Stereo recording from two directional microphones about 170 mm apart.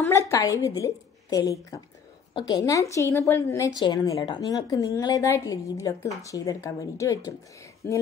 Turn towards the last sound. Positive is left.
turn(degrees=10)  # may be behind; listen again after turning